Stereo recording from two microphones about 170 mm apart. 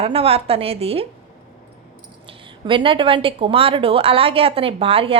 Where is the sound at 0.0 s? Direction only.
35° right (ahead or behind).